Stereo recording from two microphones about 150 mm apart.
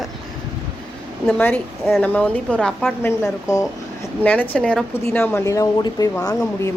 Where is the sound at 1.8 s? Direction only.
Centre (ahead or behind); by 3.7 s 20° left (ahead or behind).